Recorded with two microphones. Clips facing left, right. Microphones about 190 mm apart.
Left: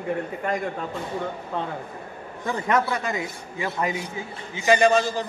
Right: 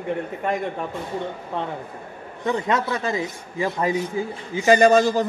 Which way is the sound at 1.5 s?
20° right (ahead or behind).